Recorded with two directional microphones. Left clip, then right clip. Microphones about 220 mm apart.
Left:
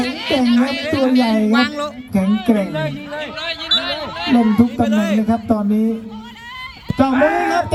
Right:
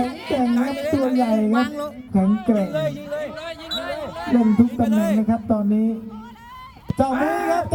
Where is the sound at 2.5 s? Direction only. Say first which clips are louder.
Even; 60° right (ahead or behind).